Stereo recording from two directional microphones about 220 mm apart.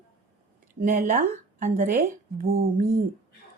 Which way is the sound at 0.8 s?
40° right (ahead or behind).